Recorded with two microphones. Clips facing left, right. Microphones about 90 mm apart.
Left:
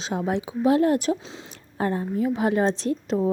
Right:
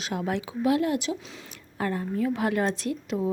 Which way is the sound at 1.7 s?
25° left (ahead or behind).